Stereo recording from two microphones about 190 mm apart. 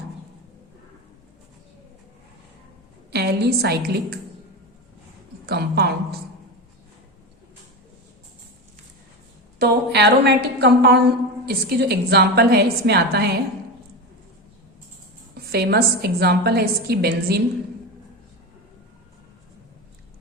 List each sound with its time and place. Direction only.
3.1 s a woman's voice: 60° right (ahead or behind)
5.5 s a woman's voice: 55° right (ahead or behind)
9.6 s a woman's voice: 55° right (ahead or behind)
15.5 s a woman's voice: 60° right (ahead or behind)